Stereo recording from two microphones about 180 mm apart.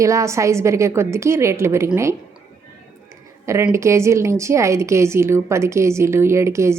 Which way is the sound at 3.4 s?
15° right (ahead or behind).